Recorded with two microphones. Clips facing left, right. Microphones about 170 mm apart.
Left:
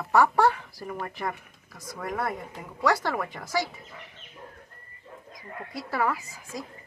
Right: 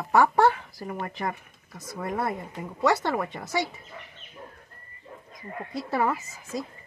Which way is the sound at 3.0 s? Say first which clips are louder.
Right 2 dB; 25° right (ahead or behind).